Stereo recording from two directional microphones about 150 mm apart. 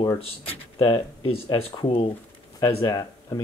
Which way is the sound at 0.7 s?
30° left (ahead or behind).